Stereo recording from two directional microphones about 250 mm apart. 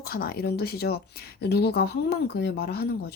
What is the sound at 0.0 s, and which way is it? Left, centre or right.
Speech, left.